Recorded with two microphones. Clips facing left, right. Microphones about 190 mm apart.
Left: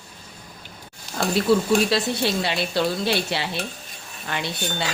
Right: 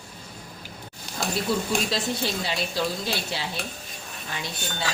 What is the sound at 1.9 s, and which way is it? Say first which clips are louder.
Speech: left 5 dB; 70° left (ahead or behind).